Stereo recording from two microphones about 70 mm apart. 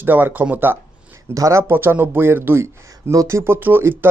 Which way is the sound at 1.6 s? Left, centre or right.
Right.